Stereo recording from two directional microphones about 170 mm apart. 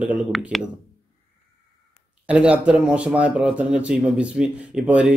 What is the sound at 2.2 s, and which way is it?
Speech, 5° right (ahead or behind).